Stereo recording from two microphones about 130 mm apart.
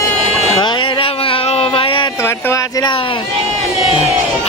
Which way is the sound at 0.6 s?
40° left (ahead or behind).